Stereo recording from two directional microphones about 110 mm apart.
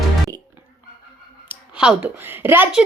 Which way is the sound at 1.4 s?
15° right (ahead or behind).